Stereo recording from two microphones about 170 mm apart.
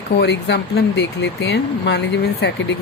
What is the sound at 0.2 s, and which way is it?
Speech, 90° left.